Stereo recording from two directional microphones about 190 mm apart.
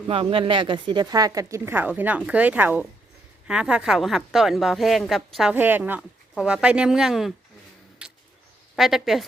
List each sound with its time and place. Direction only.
0.1 s a woman's voice: 30° right (ahead or behind); by 7.3 s centre (ahead or behind)
8.0 s a sound: 5° right (ahead or behind)
8.7 s a woman's voice: centre (ahead or behind)